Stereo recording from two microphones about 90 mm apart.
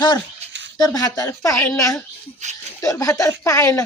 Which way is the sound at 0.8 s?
40° left (ahead or behind).